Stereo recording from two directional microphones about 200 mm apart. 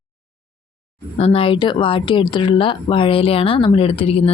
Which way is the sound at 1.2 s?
30° left (ahead or behind).